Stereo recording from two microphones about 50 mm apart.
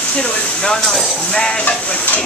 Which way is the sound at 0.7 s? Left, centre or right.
Centre.